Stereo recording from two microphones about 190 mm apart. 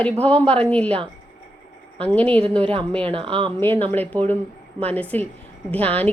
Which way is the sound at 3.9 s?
10° left (ahead or behind).